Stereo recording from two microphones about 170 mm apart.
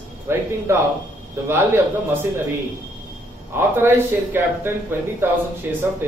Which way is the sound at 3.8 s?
15° right (ahead or behind).